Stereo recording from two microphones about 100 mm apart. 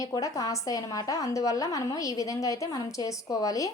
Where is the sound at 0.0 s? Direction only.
35° left (ahead or behind).